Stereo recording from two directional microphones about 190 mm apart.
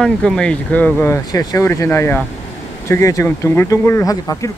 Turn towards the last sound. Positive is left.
turn(degrees=20)  # may be behind; listen again after turning